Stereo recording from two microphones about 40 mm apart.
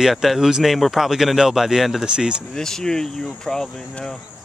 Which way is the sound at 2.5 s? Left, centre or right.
Centre.